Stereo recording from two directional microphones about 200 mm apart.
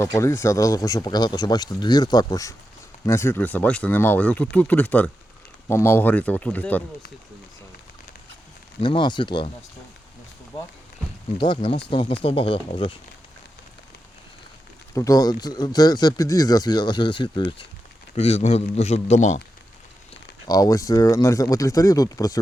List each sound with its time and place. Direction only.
0.0 s speech: 15° left (ahead or behind)
8.8 s speech: 25° left (ahead or behind)
10.5 s speech: 20° left (ahead or behind)
14.9 s a man's voice: 15° left (ahead or behind); by 19.4 s 35° left (ahead or behind)
20.5 s speech: 15° left (ahead or behind)